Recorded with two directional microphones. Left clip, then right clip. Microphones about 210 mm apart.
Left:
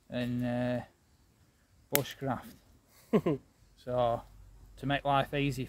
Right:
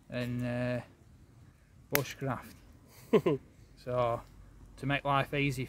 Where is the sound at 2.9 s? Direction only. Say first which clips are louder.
Right 3 dB; 30° right (ahead or behind).